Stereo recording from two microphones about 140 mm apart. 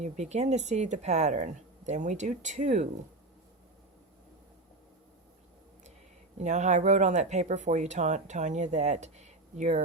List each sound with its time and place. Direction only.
0.0 s speech: 55° right (ahead or behind)
6.4 s speech: 55° right (ahead or behind)